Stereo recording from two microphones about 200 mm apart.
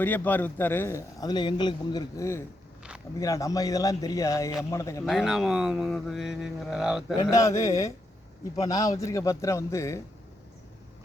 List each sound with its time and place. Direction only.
0.0 s speech: 10° left (ahead or behind)
5.0 s speech: centre (ahead or behind)
7.2 s speech: 15° left (ahead or behind)